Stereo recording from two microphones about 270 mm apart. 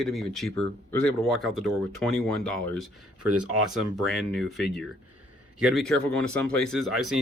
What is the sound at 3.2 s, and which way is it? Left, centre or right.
Speech, right.